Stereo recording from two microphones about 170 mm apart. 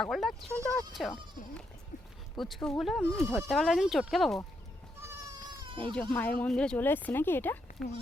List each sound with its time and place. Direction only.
0.0 s speech: centre (ahead or behind)
2.4 s speech: centre (ahead or behind)
4.9 s goat: 15° right (ahead or behind)
5.5 s baby cry: 30° right (ahead or behind)
5.9 s speech: 5° left (ahead or behind)